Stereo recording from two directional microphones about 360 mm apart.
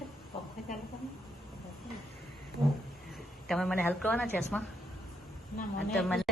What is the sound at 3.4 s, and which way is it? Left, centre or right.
Speech, centre.